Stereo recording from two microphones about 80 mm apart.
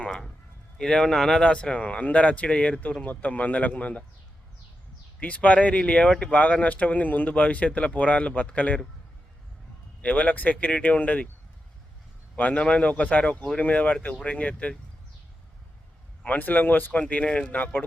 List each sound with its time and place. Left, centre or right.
0.0 s a man's voice: centre
5.2 s speech: centre
10.0 s speech: centre
12.4 s speech: centre
16.2 s speech: left